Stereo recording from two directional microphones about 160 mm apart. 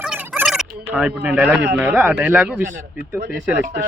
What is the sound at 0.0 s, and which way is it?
Fowl, 5° right (ahead or behind).